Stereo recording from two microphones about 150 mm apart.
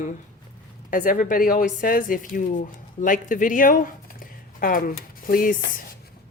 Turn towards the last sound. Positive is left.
turn(degrees=65)  # may be behind; listen again after turning